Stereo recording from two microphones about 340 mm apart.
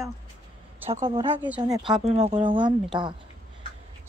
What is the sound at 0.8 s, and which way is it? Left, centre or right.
Speech, centre.